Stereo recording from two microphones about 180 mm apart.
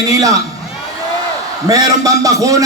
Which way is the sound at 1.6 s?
20° right (ahead or behind).